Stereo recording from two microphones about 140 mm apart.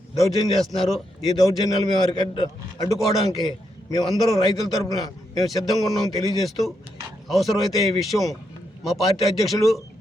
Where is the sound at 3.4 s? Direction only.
25° left (ahead or behind).